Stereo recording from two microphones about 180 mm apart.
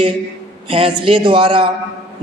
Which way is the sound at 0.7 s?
30° right (ahead or behind).